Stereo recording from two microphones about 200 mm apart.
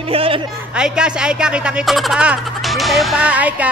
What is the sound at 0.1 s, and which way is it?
Speech, 30° right (ahead or behind).